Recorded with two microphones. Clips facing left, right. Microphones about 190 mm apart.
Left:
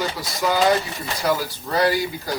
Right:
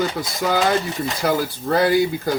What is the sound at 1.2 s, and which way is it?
A man's voice, 55° right (ahead or behind).